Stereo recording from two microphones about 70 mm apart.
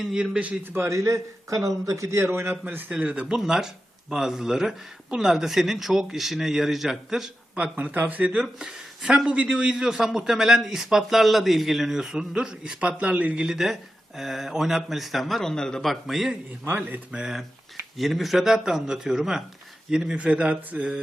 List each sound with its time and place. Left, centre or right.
0.0 s a man's voice: centre
0.6 s speech: right
0.9 s a man's voice: right
2.6 s a man's voice: centre
7.6 s speech: right
8.5 s a man's voice: centre
16.7 s a man's voice: centre